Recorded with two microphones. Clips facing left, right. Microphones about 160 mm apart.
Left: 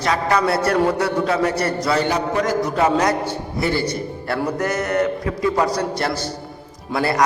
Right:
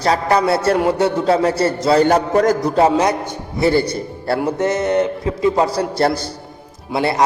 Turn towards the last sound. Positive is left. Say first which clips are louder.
# right 2 dB
turn(degrees=-25)  # may be behind; listen again after turning